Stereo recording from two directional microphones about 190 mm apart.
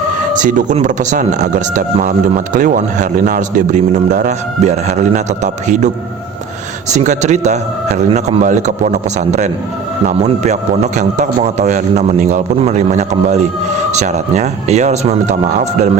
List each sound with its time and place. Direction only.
0.3 s speech: 40° right (ahead or behind)
6.9 s speech: 40° right (ahead or behind)